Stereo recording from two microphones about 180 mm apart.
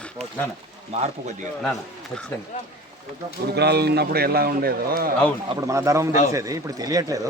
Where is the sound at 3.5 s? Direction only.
65° right (ahead or behind).